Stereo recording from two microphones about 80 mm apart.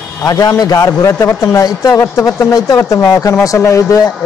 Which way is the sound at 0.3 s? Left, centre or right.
Left.